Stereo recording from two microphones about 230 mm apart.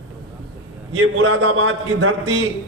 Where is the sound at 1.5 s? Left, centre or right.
Right.